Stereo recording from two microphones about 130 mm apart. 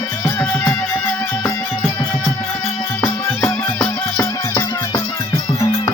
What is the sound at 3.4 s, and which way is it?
Music, 20° left (ahead or behind).